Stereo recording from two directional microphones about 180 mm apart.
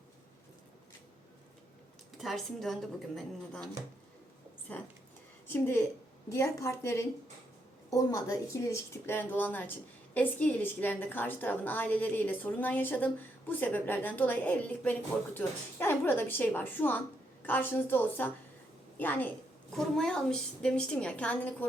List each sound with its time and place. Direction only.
2.1 s a woman's voice: centre (ahead or behind)
4.7 s a woman's voice: 10° left (ahead or behind)